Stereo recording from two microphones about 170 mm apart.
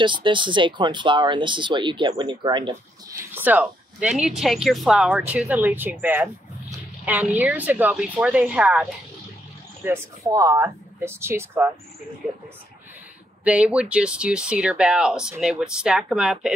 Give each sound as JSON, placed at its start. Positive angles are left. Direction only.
{"t": 0.0, "sound": "speech", "side_deg": -30}
{"t": 3.2, "sound": "speech", "side_deg": -10}
{"t": 9.8, "sound": "speech", "side_deg": -20}
{"t": 13.4, "sound": "speech", "side_deg": -5}